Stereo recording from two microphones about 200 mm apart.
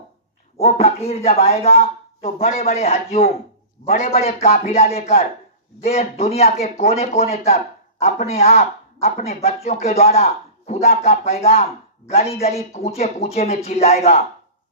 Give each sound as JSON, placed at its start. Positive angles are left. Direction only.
{"t": 0.6, "sound": "speech", "side_deg": 30}